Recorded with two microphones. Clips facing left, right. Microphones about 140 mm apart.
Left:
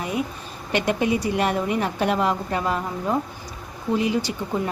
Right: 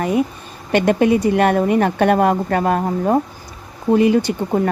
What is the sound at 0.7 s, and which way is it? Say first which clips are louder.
A woman's voice: right 8 dB; 55° right (ahead or behind).